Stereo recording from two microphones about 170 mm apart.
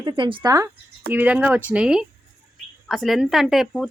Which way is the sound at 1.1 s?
10° right (ahead or behind).